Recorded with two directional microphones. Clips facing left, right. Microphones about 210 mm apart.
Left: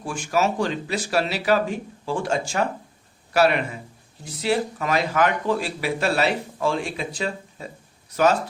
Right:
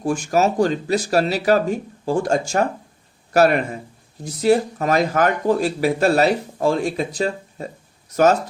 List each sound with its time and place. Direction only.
0.0 s speech: 40° right (ahead or behind)